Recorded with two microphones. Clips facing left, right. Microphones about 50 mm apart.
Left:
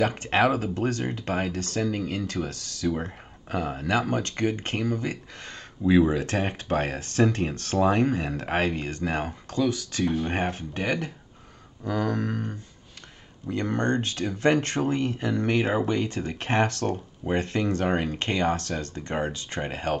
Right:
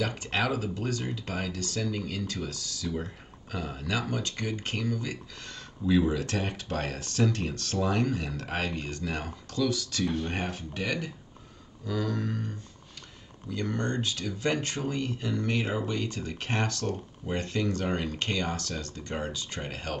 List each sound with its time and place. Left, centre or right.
0.0 s speech: left